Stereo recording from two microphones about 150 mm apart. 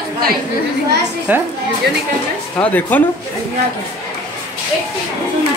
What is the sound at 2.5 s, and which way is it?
Speech, 10° left (ahead or behind).